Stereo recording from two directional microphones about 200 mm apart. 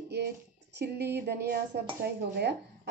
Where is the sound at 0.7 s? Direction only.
55° right (ahead or behind).